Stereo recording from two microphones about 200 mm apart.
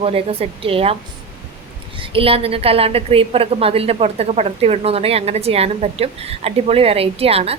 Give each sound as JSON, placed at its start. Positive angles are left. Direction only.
{"t": 0.0, "sound": "a woman's voice", "side_deg": -30}
{"t": 2.0, "sound": "a woman's voice", "side_deg": -30}